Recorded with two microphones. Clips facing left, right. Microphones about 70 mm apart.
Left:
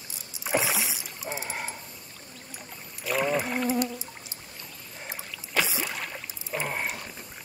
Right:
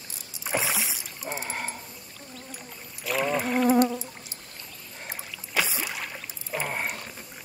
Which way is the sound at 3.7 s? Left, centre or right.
Right.